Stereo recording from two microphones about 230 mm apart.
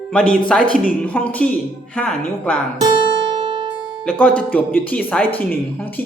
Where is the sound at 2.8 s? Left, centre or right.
Right.